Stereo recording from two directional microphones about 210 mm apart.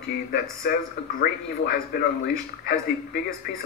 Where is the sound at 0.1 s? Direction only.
50° left (ahead or behind).